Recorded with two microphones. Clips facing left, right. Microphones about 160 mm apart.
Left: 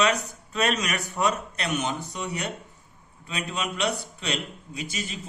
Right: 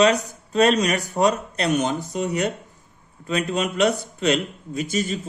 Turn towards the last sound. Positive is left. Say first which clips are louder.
# right 10 dB
turn(degrees=-50)  # may be behind; listen again after turning